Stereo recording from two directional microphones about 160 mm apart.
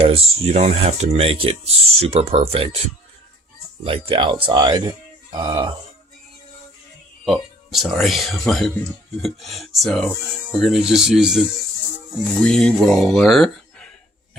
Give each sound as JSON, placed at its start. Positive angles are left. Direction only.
{"t": 0.0, "sound": "speech", "side_deg": -40}
{"t": 7.3, "sound": "speech", "side_deg": 0}